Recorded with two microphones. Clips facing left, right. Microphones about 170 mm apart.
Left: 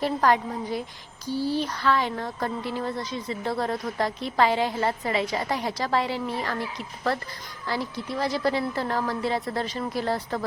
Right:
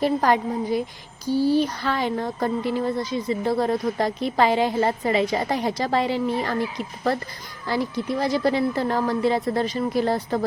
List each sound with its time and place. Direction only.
0.0 s a woman's voice: 15° right (ahead or behind)